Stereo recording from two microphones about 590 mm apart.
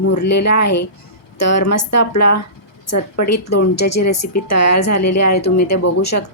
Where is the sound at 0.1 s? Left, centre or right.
Left.